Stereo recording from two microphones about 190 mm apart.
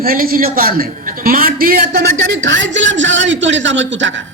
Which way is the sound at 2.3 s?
75° right (ahead or behind).